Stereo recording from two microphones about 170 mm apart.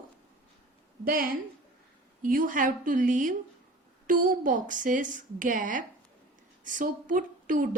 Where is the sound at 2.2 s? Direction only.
50° right (ahead or behind).